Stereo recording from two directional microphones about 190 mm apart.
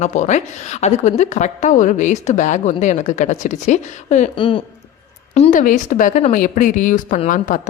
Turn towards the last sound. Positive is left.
turn(degrees=45)  # may be behind; listen again after turning